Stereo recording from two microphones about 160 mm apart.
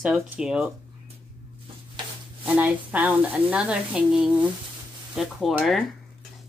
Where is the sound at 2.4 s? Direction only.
10° right (ahead or behind).